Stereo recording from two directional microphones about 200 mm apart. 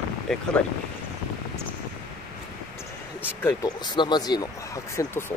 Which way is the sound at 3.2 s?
15° left (ahead or behind).